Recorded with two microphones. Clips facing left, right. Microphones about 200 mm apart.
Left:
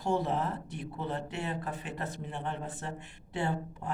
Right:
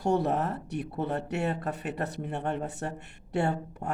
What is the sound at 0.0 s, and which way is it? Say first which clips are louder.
A man's voice: right 4 dB; 65° right (ahead or behind).